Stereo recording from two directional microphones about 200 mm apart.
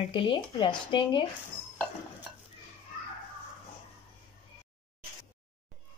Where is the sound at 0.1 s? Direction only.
25° left (ahead or behind).